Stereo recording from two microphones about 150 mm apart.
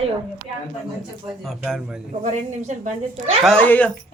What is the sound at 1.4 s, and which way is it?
Speech, centre (ahead or behind).